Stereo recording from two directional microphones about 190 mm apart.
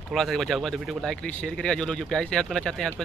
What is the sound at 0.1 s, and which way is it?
Speech, centre (ahead or behind).